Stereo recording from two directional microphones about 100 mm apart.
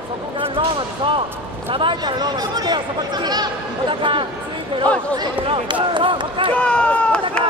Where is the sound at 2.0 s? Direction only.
45° right (ahead or behind).